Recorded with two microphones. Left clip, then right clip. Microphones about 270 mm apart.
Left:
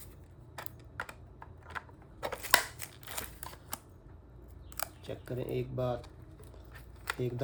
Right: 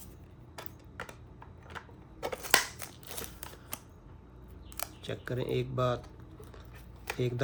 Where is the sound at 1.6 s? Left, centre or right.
Centre.